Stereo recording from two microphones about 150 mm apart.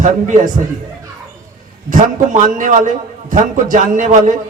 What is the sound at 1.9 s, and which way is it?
A man's voice, 60° right (ahead or behind).